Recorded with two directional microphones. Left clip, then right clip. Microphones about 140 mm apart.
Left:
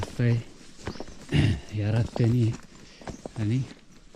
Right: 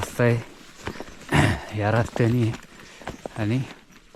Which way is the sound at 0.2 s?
25° left (ahead or behind).